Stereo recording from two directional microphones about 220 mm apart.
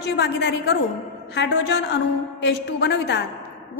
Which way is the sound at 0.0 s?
50° left (ahead or behind).